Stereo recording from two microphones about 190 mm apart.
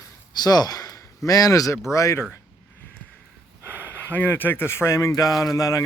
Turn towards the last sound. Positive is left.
turn(degrees=15)  # may be behind; listen again after turning